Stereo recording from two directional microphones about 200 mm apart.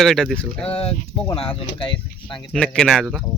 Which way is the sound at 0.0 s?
Centre (ahead or behind).